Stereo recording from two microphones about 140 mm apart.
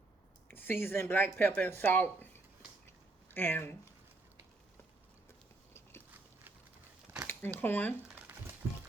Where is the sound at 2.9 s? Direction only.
15° left (ahead or behind).